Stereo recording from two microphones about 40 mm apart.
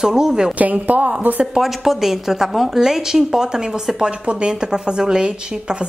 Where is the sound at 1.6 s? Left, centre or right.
Centre.